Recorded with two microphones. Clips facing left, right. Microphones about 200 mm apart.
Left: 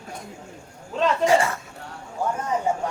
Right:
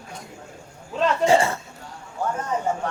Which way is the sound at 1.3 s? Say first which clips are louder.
Right 3 dB; 25° right (ahead or behind).